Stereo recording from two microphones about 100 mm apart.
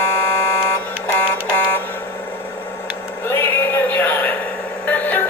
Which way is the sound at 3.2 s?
25° left (ahead or behind).